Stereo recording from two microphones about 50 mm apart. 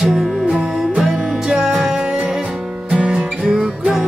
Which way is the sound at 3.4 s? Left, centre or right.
Centre.